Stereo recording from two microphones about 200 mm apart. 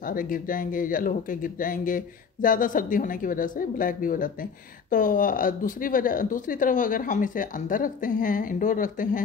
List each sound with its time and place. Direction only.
0.0 s speech: 45° left (ahead or behind)